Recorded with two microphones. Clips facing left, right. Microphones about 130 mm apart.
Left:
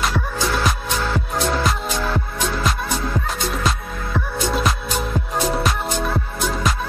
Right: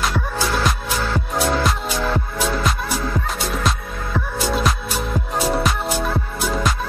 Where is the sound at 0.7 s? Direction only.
Centre (ahead or behind).